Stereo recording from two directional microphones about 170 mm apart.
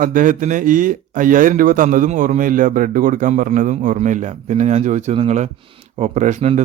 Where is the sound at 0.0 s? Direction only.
50° right (ahead or behind).